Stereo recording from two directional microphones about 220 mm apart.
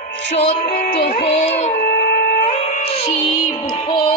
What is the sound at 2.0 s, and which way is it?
Wind instrument, 45° left (ahead or behind).